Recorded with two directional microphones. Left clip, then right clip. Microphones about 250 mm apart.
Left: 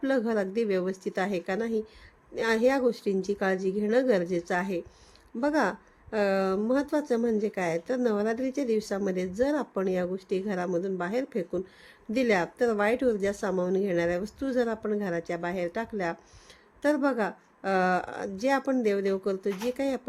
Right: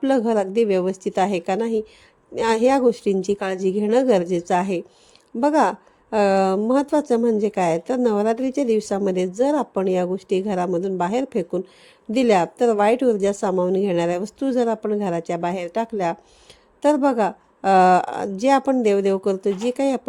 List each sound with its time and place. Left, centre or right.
0.0 s speech: right